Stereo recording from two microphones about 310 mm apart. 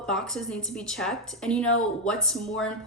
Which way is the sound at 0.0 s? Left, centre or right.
Centre.